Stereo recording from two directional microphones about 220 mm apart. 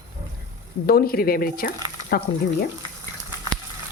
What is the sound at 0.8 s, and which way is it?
Speech, 45° left (ahead or behind).